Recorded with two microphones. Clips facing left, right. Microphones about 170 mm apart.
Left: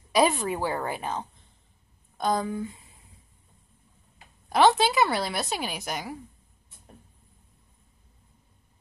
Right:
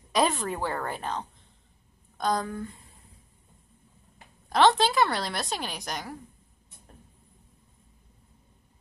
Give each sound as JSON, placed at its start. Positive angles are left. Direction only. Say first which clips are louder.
{"t": 0.1, "sound": "a woman's voice", "louder": "left 3 dB", "side_deg": 10}
{"t": 4.5, "sound": "a woman's voice", "louder": "left 1 dB", "side_deg": 5}